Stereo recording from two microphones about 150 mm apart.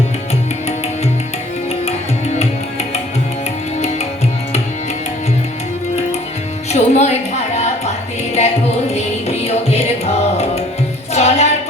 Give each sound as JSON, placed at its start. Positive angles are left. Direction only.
{"t": 3.8, "sound": "music", "side_deg": 45}
{"t": 6.7, "sound": "a sound", "side_deg": 50}
{"t": 8.4, "sound": "music", "side_deg": 45}